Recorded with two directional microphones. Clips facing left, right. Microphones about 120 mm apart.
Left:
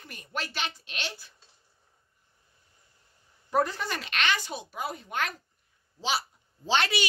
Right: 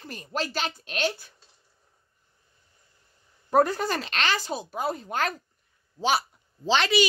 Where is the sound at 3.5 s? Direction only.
45° right (ahead or behind).